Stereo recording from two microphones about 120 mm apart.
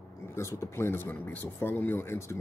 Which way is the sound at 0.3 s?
25° left (ahead or behind).